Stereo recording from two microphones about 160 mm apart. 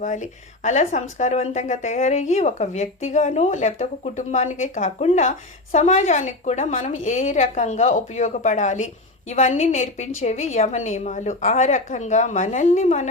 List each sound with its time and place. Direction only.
0.0 s speech: 50° left (ahead or behind)